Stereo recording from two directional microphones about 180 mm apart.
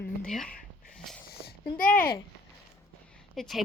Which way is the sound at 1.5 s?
50° left (ahead or behind).